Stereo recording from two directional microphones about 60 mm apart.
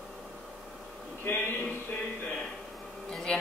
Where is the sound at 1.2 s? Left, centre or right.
Left.